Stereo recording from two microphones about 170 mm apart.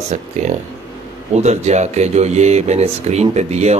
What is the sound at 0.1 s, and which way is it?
Speech, 45° right (ahead or behind).